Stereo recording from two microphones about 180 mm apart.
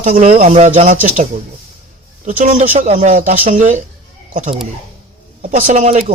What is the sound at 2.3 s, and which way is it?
Speech, 45° right (ahead or behind).